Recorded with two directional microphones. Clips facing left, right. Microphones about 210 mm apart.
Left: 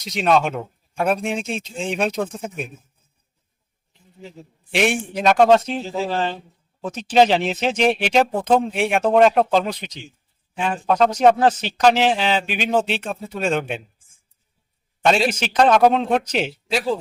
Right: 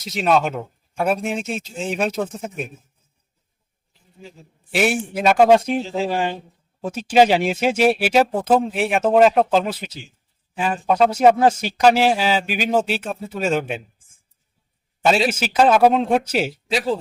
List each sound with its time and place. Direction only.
0.0 s speech: 5° right (ahead or behind)
4.7 s speech: 5° right (ahead or behind)
15.0 s speech: 5° right (ahead or behind)